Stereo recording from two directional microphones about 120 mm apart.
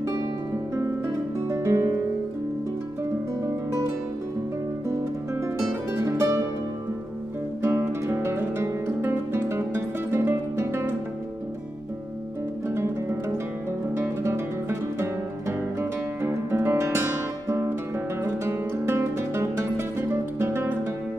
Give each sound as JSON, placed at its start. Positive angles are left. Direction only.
{"t": 0.7, "sound": "music", "side_deg": -25}
{"t": 5.9, "sound": "music", "side_deg": -25}
{"t": 7.6, "sound": "music", "side_deg": -20}
{"t": 12.6, "sound": "music", "side_deg": -25}